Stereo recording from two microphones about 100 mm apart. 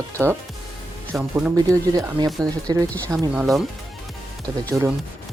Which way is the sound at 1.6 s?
35° right (ahead or behind).